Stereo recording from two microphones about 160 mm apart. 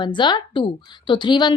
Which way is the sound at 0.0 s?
30° left (ahead or behind).